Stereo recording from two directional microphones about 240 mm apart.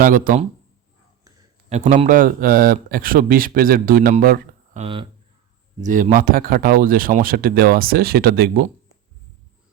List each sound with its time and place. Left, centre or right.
0.0 s speech: right
1.7 s speech: right